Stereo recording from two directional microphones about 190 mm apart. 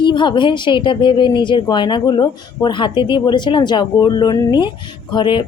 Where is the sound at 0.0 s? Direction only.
25° left (ahead or behind).